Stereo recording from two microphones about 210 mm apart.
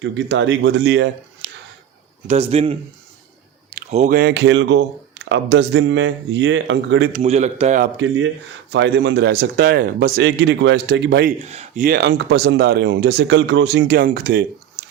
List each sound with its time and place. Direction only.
0.0 s speech: 60° right (ahead or behind)
2.2 s a man's voice: 30° right (ahead or behind)
3.8 s speech: 40° right (ahead or behind)
4.2 s speech: 55° right (ahead or behind)
7.1 s a man's voice: 30° right (ahead or behind)
7.9 s speech: 60° right (ahead or behind)
11.3 s speech: 30° right (ahead or behind)